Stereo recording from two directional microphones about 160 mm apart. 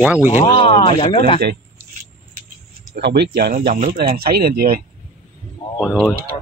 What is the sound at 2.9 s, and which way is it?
Speech, 90° right.